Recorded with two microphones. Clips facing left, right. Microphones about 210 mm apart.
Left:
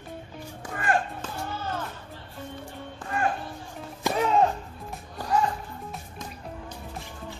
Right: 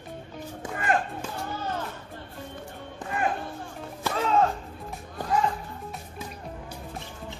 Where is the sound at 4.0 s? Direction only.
15° left (ahead or behind).